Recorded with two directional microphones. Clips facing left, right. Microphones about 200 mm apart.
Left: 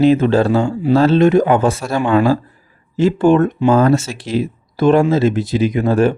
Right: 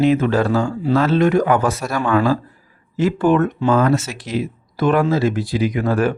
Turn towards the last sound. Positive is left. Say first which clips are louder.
# left 4 dB
turn(degrees=25)  # may be behind; listen again after turning